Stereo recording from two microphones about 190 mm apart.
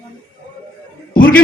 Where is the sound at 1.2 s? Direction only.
50° left (ahead or behind).